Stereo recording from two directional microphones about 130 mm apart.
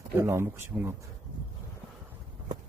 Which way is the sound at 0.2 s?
20° right (ahead or behind).